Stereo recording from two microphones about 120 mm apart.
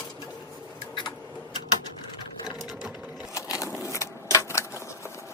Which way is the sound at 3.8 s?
25° left (ahead or behind).